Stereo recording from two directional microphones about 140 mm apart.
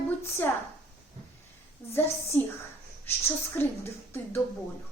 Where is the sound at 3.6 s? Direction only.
15° left (ahead or behind).